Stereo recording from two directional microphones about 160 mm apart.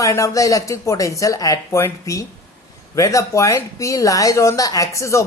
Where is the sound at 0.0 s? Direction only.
20° left (ahead or behind).